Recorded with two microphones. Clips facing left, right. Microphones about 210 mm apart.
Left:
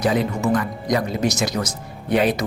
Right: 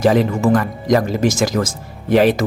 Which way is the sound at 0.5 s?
45° right (ahead or behind).